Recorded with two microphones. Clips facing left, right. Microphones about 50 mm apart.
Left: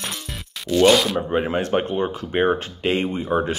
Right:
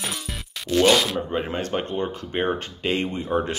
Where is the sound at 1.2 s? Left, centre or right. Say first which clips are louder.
Left 4 dB; centre.